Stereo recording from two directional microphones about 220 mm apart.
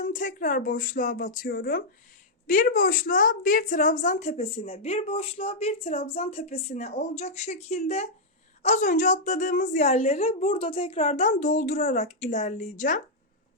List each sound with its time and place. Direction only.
0.0 s a woman's voice: 35° left (ahead or behind)